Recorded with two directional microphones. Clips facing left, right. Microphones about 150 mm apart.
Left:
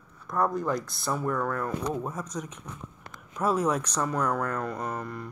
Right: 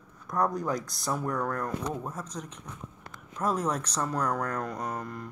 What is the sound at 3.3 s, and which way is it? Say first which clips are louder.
Speech: left 3 dB; 10° left (ahead or behind).